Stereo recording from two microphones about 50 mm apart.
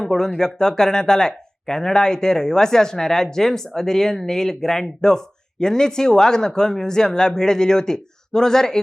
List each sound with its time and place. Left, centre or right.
0.0 s speech: centre